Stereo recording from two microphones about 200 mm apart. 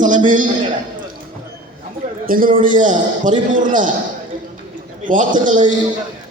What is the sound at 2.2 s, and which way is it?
A man's voice, 45° right (ahead or behind).